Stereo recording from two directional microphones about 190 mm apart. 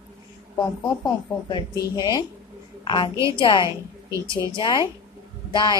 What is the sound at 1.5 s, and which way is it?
A woman's voice, 20° left (ahead or behind).